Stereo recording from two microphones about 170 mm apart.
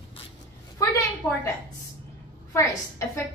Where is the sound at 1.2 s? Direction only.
15° left (ahead or behind).